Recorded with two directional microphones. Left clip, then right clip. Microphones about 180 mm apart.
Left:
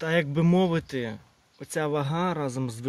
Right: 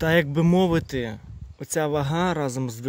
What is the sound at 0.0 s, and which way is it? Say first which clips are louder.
Speech: right 4 dB; 25° right (ahead or behind).